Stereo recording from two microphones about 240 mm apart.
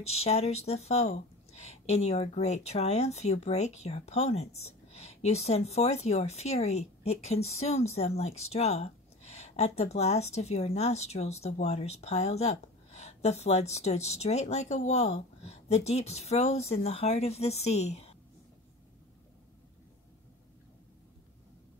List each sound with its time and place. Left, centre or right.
0.0 s speech: left